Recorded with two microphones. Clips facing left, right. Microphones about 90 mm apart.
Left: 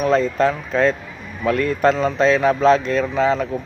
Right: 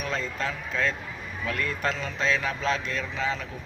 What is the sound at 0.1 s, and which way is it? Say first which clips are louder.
Speech: left 14 dB; 55° left (ahead or behind).